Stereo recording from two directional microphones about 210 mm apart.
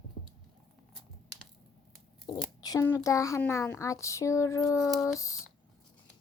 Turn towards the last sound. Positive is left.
turn(degrees=15)  # may be behind; listen again after turning